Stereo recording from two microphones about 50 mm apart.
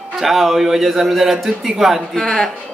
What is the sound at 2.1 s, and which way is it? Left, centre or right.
Speech, centre.